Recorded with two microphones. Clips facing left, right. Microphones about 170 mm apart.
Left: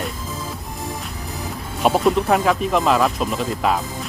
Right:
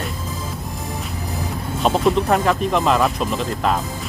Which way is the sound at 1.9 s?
Centre (ahead or behind).